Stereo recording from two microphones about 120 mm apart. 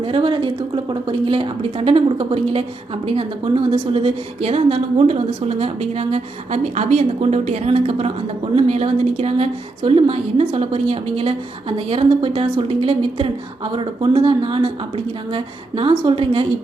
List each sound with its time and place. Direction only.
0.0 s a woman's voice: 50° right (ahead or behind)